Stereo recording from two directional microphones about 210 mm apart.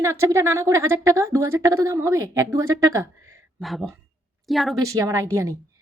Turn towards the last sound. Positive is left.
turn(degrees=-15)  # may be behind; listen again after turning